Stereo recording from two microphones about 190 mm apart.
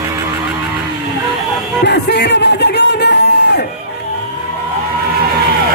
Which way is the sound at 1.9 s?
60° left (ahead or behind).